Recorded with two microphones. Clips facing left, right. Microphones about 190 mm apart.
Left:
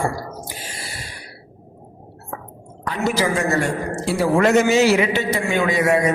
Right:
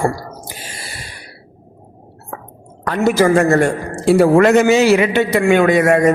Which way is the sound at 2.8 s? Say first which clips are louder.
Right 7 dB; 60° right (ahead or behind).